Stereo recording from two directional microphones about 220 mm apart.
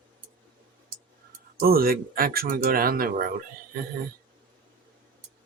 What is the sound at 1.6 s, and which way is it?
Speech, 40° right (ahead or behind).